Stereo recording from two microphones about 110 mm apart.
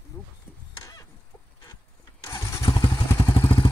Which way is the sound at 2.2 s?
30° left (ahead or behind).